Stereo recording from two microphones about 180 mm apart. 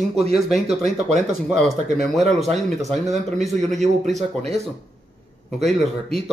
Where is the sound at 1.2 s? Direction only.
5° right (ahead or behind).